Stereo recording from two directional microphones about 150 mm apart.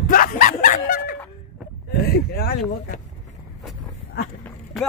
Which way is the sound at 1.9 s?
90° left.